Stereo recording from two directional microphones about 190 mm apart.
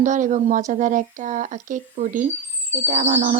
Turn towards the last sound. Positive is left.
turn(degrees=-35)  # may be behind; listen again after turning